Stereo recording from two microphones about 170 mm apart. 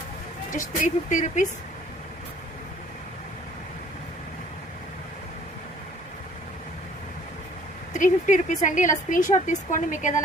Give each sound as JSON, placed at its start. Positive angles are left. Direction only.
{"t": 0.5, "sound": "speech", "side_deg": 50}
{"t": 7.9, "sound": "speech", "side_deg": 50}